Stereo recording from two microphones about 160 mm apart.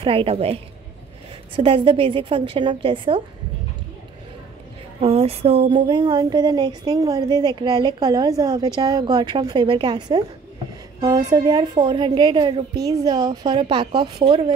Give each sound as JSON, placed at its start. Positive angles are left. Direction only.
{"t": 0.0, "sound": "a woman's voice", "side_deg": -35}
{"t": 1.6, "sound": "a woman's voice", "side_deg": -35}
{"t": 5.0, "sound": "speech", "side_deg": -40}